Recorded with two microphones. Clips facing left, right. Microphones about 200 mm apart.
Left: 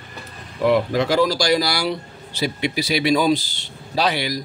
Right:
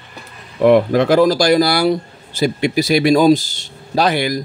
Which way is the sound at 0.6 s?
55° right (ahead or behind).